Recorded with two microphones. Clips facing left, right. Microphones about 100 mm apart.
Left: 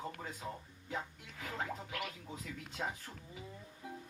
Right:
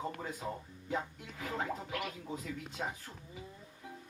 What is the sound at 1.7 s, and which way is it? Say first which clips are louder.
Speech: right 4 dB; 20° right (ahead or behind).